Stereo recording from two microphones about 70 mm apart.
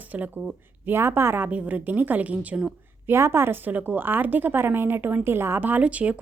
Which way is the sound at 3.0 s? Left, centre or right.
Right.